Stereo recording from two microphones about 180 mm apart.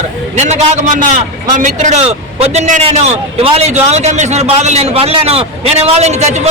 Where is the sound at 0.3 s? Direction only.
40° right (ahead or behind).